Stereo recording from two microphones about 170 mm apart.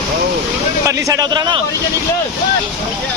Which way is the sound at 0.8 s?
20° right (ahead or behind).